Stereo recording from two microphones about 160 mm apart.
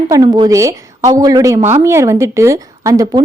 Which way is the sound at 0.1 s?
25° right (ahead or behind).